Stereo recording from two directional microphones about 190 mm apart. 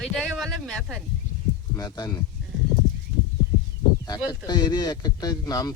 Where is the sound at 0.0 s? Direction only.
Centre (ahead or behind).